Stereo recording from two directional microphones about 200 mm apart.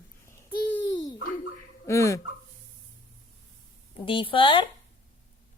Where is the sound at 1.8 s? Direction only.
15° left (ahead or behind).